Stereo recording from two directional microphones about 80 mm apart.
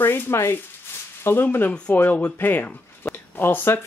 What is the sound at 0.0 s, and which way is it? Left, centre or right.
Speech, left.